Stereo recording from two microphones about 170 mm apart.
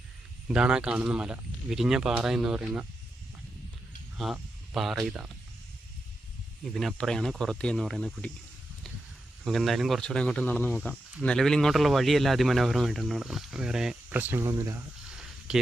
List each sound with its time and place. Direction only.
0.4 s speech: 5° right (ahead or behind)
4.2 s speech: centre (ahead or behind)
6.7 s speech: centre (ahead or behind)
9.4 s speech: centre (ahead or behind); by 14.8 s 15° right (ahead or behind)
15.1 s a sound: 5° right (ahead or behind)